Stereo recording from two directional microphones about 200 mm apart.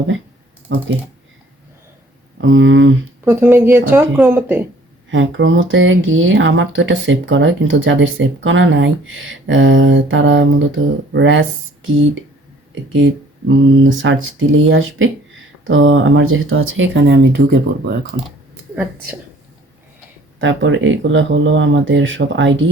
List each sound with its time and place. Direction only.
0.7 s speech: 75° right (ahead or behind)
2.4 s speech: 75° right (ahead or behind)
3.2 s a woman's voice: 10° right (ahead or behind)
5.1 s speech: 75° right (ahead or behind)
13.5 s speech: 75° right (ahead or behind); by 17.9 s 55° right (ahead or behind)
20.4 s speech: 70° right (ahead or behind)